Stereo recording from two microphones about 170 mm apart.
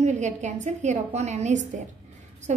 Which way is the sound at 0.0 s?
45° right (ahead or behind).